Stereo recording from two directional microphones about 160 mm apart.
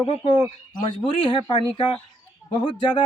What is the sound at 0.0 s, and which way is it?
Speech, 30° left (ahead or behind).